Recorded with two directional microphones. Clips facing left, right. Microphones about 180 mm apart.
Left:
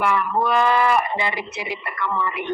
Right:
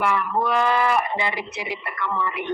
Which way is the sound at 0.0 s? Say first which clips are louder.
Left 2 dB; 70° left (ahead or behind).